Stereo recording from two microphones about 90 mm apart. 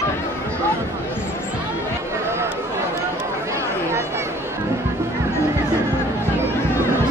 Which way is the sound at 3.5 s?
30° right (ahead or behind).